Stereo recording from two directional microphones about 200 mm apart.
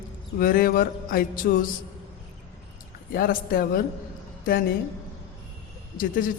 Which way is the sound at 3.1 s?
45° left (ahead or behind).